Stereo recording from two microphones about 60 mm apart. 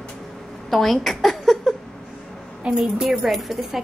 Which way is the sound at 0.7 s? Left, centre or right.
Centre.